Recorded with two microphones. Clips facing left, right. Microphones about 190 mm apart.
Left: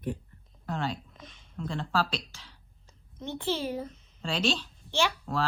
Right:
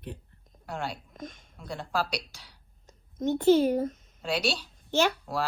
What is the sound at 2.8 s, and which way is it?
A woman's voice, 45° right (ahead or behind).